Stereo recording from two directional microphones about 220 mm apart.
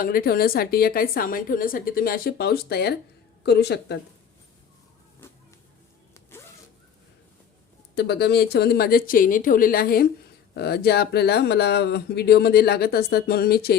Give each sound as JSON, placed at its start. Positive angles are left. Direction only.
{"t": 0.0, "sound": "a woman's voice", "side_deg": 40}
{"t": 7.9, "sound": "speech", "side_deg": 50}